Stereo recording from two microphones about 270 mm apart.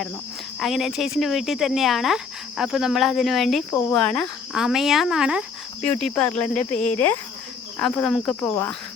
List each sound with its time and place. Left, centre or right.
0.6 s speech: centre
6.5 s speech: left
7.8 s speech: centre